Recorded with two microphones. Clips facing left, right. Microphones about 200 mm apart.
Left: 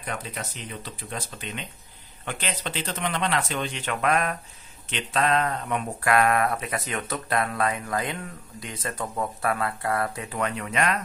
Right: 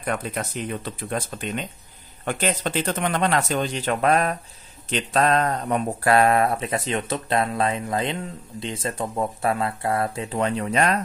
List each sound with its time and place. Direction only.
0.0 s speech: 55° right (ahead or behind); by 11.0 s 35° right (ahead or behind)